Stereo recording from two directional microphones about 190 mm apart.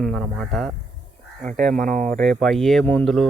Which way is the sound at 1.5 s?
45° right (ahead or behind).